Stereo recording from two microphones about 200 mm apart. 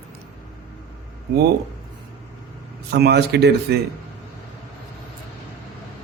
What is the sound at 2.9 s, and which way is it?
Speech, 55° right (ahead or behind).